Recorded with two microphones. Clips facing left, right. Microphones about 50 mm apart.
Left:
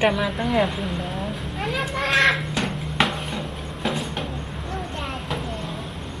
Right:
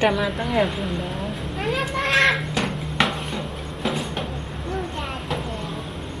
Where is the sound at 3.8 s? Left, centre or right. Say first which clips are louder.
Right 1 dB; centre.